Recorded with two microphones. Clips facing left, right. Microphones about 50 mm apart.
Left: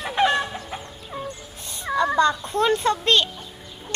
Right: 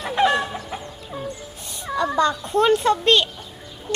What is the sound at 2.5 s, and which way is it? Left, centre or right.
Speech, right.